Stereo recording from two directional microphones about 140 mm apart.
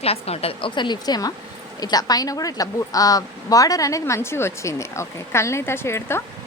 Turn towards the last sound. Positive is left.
turn(degrees=20)  # may be behind; listen again after turning